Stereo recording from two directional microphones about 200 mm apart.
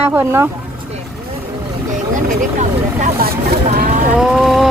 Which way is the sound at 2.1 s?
40° right (ahead or behind).